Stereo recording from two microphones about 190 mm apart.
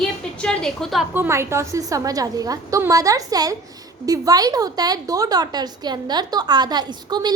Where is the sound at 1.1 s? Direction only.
10° right (ahead or behind).